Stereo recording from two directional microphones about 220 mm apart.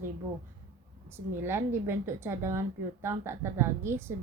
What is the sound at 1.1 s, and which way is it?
A woman's voice, 10° right (ahead or behind).